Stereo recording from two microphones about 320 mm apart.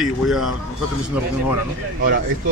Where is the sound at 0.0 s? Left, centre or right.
Centre.